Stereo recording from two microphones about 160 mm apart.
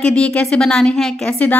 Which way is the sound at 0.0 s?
5° left (ahead or behind).